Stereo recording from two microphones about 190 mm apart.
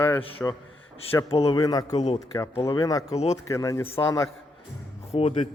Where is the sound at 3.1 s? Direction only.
35° left (ahead or behind).